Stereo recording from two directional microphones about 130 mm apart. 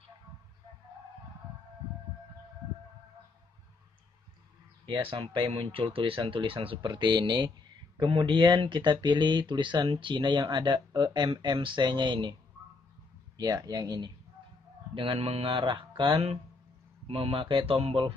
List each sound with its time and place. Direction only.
4.8 s speech: 35° right (ahead or behind)
13.4 s speech: 30° right (ahead or behind)
15.0 s speech: 45° right (ahead or behind)